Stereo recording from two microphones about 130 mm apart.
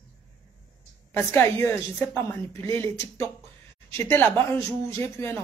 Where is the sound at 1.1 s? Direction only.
15° left (ahead or behind).